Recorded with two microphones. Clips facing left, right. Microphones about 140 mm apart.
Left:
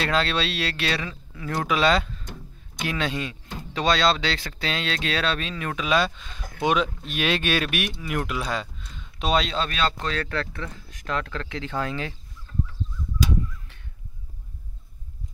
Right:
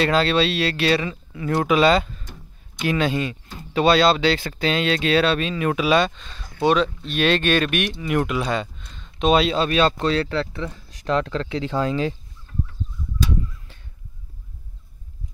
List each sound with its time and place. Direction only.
0.0 s speech: centre (ahead or behind)
5.9 s speech: 5° left (ahead or behind)
9.3 s speech: 5° right (ahead or behind)
9.8 s speech: 25° right (ahead or behind)
11.7 s speech: 20° right (ahead or behind)